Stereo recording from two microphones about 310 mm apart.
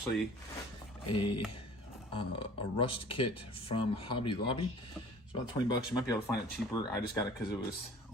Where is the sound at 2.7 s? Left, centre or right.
Centre.